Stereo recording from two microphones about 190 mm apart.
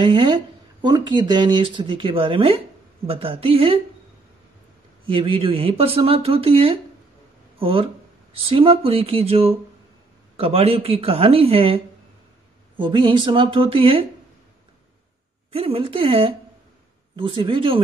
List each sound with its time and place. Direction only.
0.0 s a woman's voice: 25° right (ahead or behind)
5.0 s speech: 25° right (ahead or behind)
15.5 s speech: 30° right (ahead or behind)